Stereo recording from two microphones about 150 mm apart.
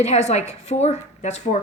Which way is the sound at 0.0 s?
50° left (ahead or behind).